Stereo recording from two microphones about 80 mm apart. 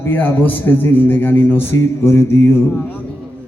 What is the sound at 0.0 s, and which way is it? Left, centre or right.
A man's voice, left.